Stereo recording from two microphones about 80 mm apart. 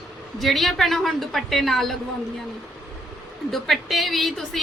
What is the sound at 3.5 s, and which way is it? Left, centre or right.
A woman's voice, centre.